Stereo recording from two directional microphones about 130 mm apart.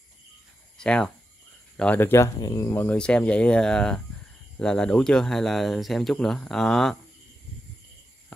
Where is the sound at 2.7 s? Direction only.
15° left (ahead or behind).